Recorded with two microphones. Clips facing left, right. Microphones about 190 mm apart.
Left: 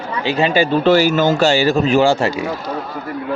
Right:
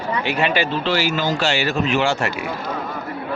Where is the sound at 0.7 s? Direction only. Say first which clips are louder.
Left 8 dB; 50° left (ahead or behind).